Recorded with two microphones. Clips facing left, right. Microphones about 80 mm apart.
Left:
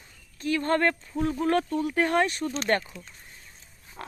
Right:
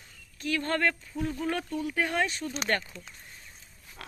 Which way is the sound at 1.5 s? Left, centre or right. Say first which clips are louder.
Left 7 dB; left.